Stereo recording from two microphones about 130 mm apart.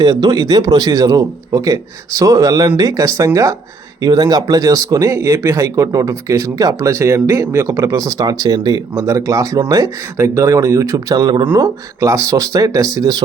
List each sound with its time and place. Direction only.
0.0 s speech: 30° right (ahead or behind)